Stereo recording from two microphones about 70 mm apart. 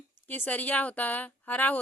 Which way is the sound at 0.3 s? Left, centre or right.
Left.